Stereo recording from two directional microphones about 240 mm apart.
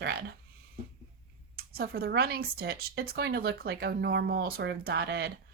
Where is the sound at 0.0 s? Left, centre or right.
Right.